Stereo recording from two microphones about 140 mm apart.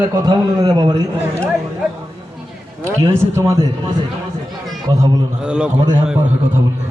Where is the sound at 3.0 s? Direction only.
20° right (ahead or behind).